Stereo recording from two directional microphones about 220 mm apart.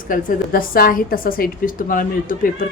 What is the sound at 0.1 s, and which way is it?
A woman's voice, 40° left (ahead or behind).